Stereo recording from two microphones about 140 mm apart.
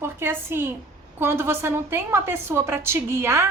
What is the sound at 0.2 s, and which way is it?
A woman's voice, 15° right (ahead or behind).